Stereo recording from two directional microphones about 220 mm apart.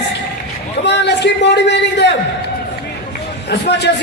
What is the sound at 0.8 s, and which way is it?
A man's voice, 50° left (ahead or behind).